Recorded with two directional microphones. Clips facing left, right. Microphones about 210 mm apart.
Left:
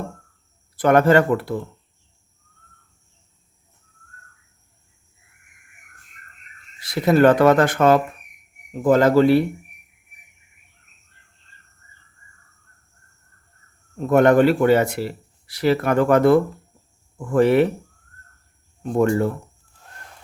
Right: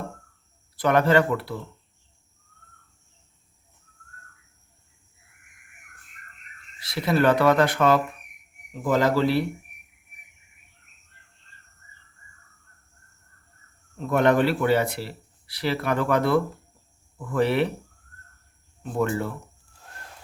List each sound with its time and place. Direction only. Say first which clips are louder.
0.8 s speech: left 5 dB; 50° left (ahead or behind)
6.8 s speech: left 6 dB; 45° left (ahead or behind)
14.0 s speech: left 6 dB; 45° left (ahead or behind)
18.8 s speech: left 7 dB; 45° left (ahead or behind)